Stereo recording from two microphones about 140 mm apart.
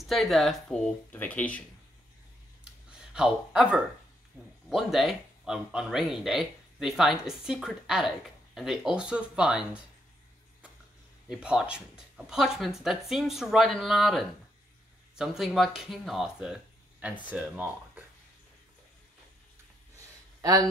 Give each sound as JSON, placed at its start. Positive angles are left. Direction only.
{"t": 0.0, "sound": "speech", "side_deg": 0}
{"t": 3.2, "sound": "speech", "side_deg": -5}
{"t": 11.2, "sound": "speech", "side_deg": -5}